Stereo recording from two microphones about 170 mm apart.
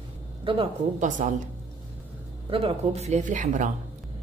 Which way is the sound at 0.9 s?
45° right (ahead or behind).